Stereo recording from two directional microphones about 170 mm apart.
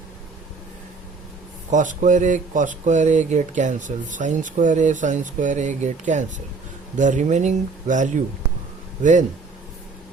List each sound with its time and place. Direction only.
1.7 s speech: 50° right (ahead or behind)